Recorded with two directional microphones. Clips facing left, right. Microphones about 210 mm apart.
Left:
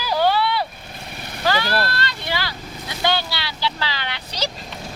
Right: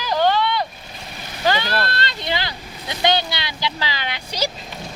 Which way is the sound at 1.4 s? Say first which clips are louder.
Even; 20° right (ahead or behind).